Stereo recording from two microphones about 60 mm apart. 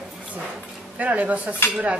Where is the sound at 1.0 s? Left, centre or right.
Right.